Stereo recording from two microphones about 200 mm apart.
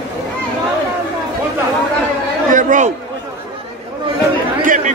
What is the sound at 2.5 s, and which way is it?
Chatter, 40° right (ahead or behind).